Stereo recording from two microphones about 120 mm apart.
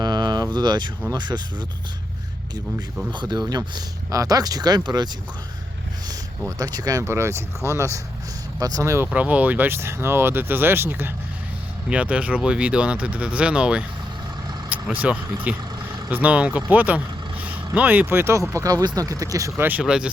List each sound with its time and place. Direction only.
0.0 s a sound: 35° right (ahead or behind)
0.5 s speech: 35° right (ahead or behind)
2.7 s speech: 40° right (ahead or behind)
6.6 s speech: 30° right (ahead or behind)
9.1 s speech: 10° right (ahead or behind)